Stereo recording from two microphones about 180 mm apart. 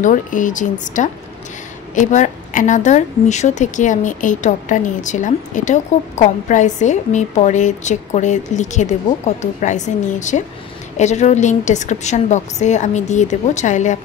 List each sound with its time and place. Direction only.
0.0 s a woman's voice: 45° left (ahead or behind)